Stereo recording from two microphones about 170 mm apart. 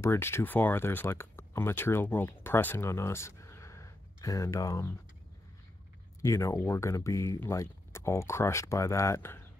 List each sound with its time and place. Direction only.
0.0 s speech: 15° left (ahead or behind)
6.2 s speech: 15° left (ahead or behind)